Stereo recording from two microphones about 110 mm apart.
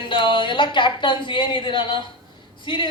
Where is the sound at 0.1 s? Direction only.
45° left (ahead or behind).